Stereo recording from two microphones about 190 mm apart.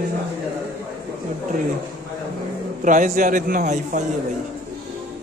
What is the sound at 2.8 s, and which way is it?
A man's voice, 45° right (ahead or behind).